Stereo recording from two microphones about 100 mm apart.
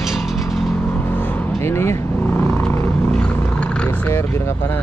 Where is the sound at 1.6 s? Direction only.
25° left (ahead or behind).